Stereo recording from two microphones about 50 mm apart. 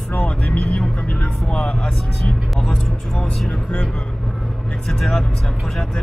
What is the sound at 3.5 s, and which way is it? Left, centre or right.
Speech, centre.